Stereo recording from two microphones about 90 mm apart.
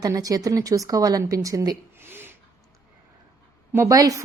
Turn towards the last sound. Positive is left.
turn(degrees=-40)  # may be behind; listen again after turning